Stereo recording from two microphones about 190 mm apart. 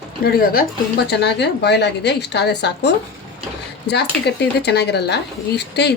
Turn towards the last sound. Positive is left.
turn(degrees=60)  # may be behind; listen again after turning